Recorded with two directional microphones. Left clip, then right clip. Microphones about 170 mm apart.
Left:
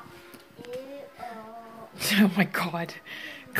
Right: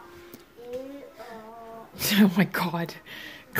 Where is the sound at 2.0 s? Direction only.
15° right (ahead or behind).